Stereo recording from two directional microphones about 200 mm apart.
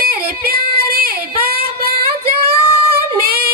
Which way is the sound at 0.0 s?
50° right (ahead or behind).